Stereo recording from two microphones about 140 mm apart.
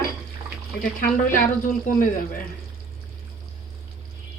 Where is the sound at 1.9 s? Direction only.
90° left.